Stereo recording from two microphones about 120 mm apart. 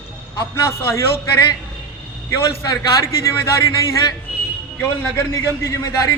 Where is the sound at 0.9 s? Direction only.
25° left (ahead or behind).